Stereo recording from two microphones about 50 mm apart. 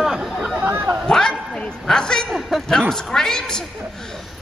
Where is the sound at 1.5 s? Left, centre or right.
Centre.